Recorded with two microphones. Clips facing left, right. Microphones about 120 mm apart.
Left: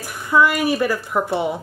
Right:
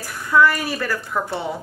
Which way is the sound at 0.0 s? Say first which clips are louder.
Even; 15° left (ahead or behind).